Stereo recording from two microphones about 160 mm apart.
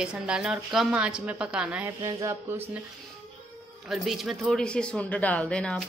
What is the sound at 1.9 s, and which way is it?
Speech, 20° right (ahead or behind).